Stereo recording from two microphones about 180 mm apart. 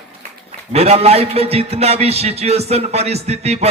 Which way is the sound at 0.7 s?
35° right (ahead or behind).